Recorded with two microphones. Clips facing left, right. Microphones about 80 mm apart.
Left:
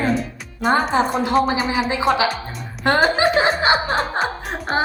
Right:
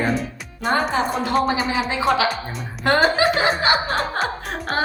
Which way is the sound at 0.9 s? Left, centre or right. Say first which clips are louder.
Left 3 dB; left.